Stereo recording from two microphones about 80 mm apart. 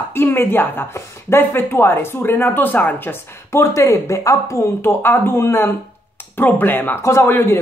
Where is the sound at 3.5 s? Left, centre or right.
Left.